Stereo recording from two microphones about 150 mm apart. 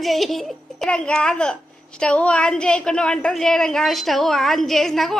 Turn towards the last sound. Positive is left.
turn(degrees=0)  # may be behind; listen again after turning